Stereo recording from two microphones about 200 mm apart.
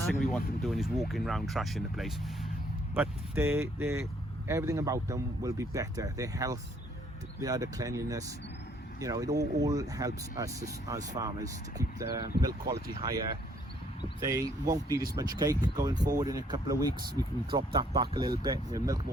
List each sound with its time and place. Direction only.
0.0 s speech: centre (ahead or behind); by 13.1 s 20° right (ahead or behind)
14.2 s speech: 15° right (ahead or behind)